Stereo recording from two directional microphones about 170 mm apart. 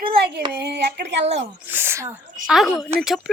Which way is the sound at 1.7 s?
10° right (ahead or behind).